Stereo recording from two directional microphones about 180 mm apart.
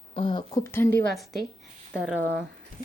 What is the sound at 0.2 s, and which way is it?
Speech, 25° left (ahead or behind).